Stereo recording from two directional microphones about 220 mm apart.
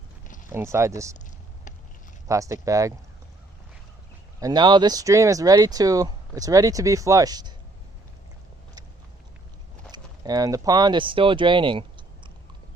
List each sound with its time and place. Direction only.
0.5 s speech: 10° right (ahead or behind)
2.2 s speech: 15° right (ahead or behind)
4.4 s speech: 15° right (ahead or behind)
9.9 s speech: 15° right (ahead or behind)